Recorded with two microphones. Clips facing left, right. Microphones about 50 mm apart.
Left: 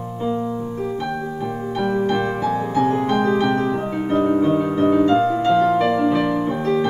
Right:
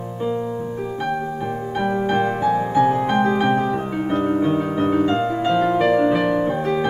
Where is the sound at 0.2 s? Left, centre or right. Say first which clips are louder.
Even; centre.